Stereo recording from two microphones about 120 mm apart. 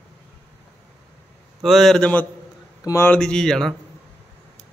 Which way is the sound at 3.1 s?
5° left (ahead or behind).